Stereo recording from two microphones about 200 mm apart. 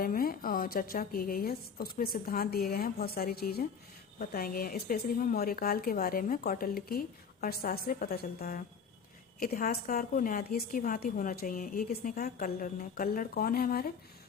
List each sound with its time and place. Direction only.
0.0 s a woman's voice: 45° left (ahead or behind)